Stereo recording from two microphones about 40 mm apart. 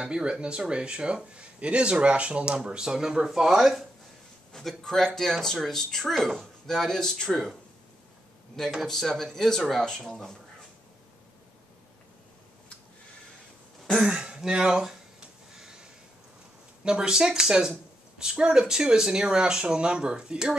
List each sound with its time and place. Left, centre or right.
0.0 s speech: right
2.8 s speech: centre
4.5 s speech: centre
8.8 s speech: centre
9.9 s speech: centre
14.1 s speech: centre
15.5 s a sound: centre
16.8 s speech: centre